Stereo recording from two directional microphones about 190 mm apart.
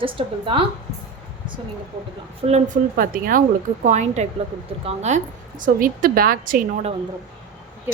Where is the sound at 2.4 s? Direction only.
35° right (ahead or behind).